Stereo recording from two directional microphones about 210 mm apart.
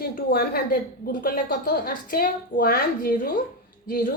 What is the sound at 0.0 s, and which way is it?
A woman's voice, 45° left (ahead or behind).